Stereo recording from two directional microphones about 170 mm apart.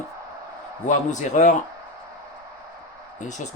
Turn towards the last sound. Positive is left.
turn(degrees=45)  # may be behind; listen again after turning